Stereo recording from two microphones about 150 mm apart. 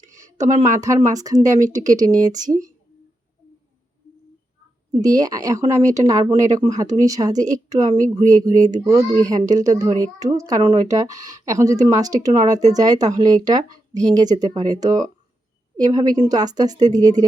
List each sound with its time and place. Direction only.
0.6 s speech: 20° right (ahead or behind)
4.9 s speech: 25° right (ahead or behind)